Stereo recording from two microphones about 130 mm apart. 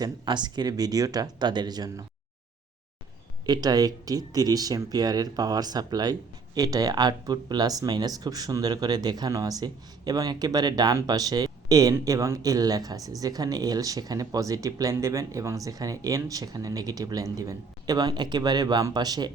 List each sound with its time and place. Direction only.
0.0 s speech: 35° right (ahead or behind)
3.4 s speech: 30° right (ahead or behind)